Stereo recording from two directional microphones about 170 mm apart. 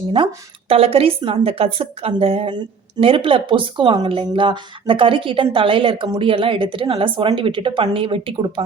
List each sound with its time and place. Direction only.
0.7 s speech: 35° right (ahead or behind)